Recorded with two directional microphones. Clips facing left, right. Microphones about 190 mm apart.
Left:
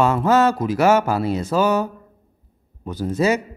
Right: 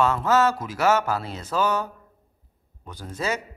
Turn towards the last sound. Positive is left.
turn(degrees=10)  # may be behind; listen again after turning